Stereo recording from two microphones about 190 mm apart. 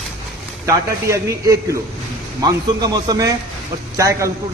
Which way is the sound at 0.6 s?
15° right (ahead or behind).